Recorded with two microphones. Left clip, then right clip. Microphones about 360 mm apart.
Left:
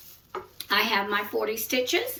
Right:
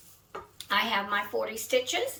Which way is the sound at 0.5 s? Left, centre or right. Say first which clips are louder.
Left 3 dB; centre.